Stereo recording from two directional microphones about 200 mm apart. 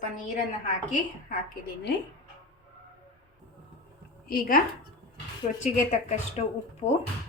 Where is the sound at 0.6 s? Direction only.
40° left (ahead or behind).